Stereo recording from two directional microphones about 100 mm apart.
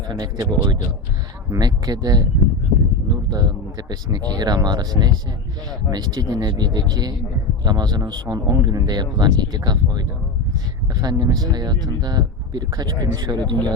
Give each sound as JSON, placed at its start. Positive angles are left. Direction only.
{"t": 0.1, "sound": "speech", "side_deg": -40}
{"t": 1.5, "sound": "speech", "side_deg": -40}